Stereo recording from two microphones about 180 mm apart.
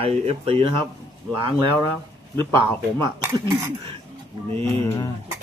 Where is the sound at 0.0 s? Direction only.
35° right (ahead or behind).